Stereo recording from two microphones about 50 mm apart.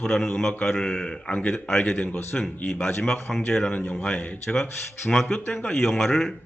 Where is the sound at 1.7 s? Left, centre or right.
Centre.